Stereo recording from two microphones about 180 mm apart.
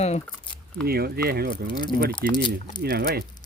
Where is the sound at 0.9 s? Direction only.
60° right (ahead or behind).